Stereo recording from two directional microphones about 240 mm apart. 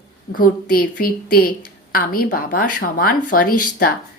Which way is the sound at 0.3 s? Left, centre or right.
Left.